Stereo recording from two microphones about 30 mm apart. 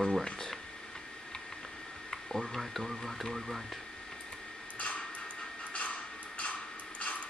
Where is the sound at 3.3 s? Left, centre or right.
Centre.